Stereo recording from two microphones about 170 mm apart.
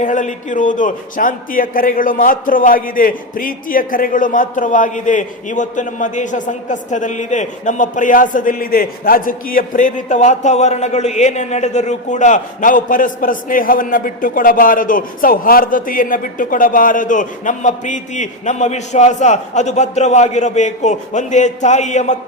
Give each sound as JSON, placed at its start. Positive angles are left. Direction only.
{"t": 0.0, "sound": "a man's voice", "side_deg": 45}